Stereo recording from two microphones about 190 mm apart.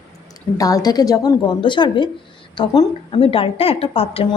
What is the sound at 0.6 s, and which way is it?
A woman's voice, 20° left (ahead or behind).